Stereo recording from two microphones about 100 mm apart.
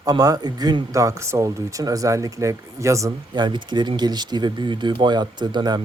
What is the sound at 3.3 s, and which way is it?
Speech, 50° right (ahead or behind).